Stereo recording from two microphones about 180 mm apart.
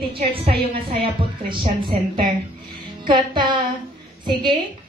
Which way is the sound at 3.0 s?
25° right (ahead or behind).